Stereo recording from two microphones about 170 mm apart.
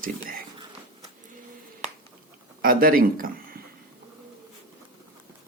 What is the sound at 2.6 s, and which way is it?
Speech, 55° right (ahead or behind).